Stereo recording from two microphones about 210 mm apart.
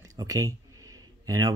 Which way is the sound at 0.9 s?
15° right (ahead or behind).